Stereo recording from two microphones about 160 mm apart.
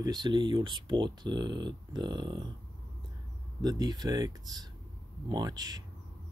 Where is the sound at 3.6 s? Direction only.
25° right (ahead or behind).